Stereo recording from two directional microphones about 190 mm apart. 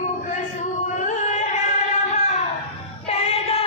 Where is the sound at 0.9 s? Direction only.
40° left (ahead or behind).